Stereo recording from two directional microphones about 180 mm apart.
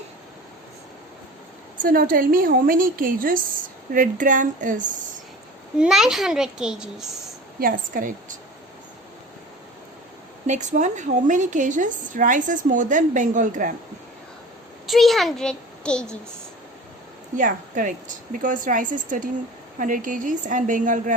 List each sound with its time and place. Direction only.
1.8 s a woman's voice: 50° right (ahead or behind)
5.7 s a child's voice: 5° right (ahead or behind)
7.6 s a woman's voice: 50° right (ahead or behind)
10.4 s a woman's voice: 40° right (ahead or behind)
14.8 s a child's voice: centre (ahead or behind)
17.3 s a woman's voice: 45° right (ahead or behind)